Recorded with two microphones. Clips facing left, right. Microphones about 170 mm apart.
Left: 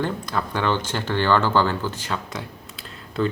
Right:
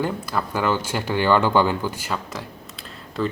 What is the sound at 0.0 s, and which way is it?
Speech, 5° right (ahead or behind).